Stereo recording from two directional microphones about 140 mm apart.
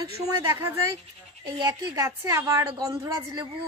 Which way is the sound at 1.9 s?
20° right (ahead or behind).